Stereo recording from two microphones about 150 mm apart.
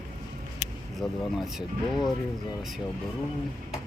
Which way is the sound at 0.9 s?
Centre (ahead or behind).